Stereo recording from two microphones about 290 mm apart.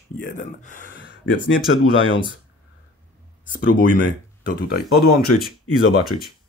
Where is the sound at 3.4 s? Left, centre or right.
Left.